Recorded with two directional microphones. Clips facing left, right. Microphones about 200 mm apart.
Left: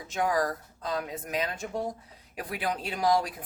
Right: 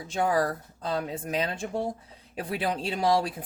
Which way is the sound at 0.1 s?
30° right (ahead or behind).